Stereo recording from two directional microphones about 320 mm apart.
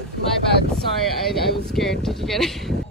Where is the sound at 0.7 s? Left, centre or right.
Centre.